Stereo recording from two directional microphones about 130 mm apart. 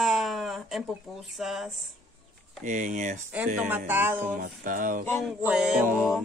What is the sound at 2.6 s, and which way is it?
Speech, 75° right (ahead or behind).